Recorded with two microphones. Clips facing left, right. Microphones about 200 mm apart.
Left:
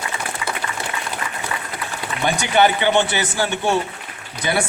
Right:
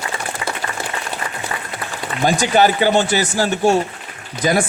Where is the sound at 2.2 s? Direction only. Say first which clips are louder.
Right 3 dB; 35° right (ahead or behind).